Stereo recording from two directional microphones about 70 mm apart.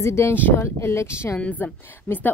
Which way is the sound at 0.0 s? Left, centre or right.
Left.